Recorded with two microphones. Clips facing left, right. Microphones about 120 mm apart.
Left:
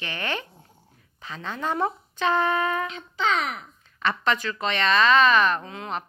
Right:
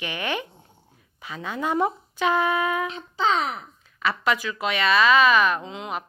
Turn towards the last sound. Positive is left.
turn(degrees=-15)  # may be behind; listen again after turning